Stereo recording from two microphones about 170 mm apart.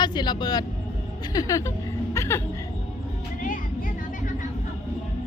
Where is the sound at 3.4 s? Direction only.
55° left (ahead or behind).